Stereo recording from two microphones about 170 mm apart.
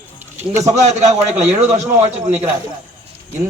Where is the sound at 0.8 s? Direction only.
40° right (ahead or behind).